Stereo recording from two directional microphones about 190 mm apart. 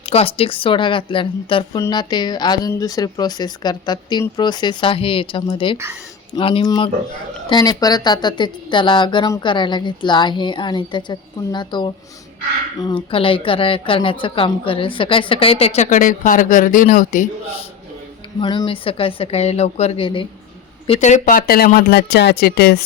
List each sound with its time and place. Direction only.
0.0 s a woman's voice: 30° left (ahead or behind)
18.3 s a woman's voice: 25° left (ahead or behind); by 22.8 s 55° left (ahead or behind)